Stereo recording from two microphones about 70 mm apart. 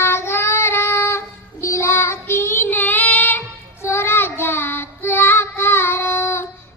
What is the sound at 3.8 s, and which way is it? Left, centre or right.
Child singing, left.